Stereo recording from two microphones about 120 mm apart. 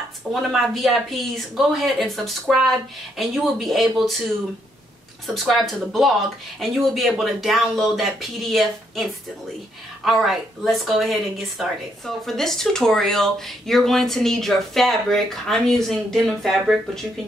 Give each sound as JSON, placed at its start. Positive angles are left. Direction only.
{"t": 0.3, "sound": "speech", "side_deg": 0}
{"t": 5.2, "sound": "speech", "side_deg": 0}